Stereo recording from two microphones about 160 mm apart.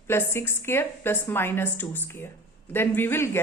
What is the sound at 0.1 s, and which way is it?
A woman's voice, 15° left (ahead or behind).